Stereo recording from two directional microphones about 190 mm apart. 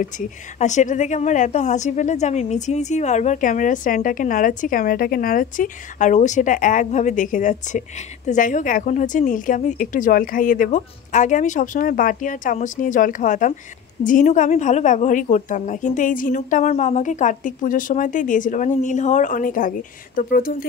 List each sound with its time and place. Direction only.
0.6 s a woman's voice: 40° left (ahead or behind)